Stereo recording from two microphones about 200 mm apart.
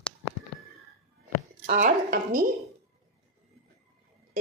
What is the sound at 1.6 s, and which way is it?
Speech, 40° right (ahead or behind).